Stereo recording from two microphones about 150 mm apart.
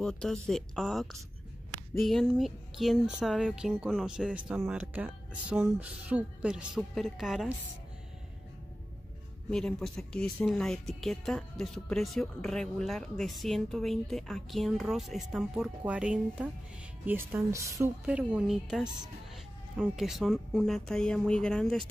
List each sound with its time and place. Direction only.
0.0 s speech: 5° left (ahead or behind)
9.5 s speech: 5° left (ahead or behind); by 17.9 s 20° right (ahead or behind)
18.0 s speech: 10° right (ahead or behind)